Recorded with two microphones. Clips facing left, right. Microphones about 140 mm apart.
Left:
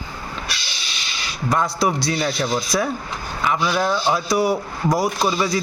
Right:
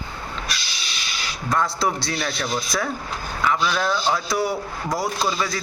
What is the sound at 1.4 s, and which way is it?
A man's voice, 20° left (ahead or behind).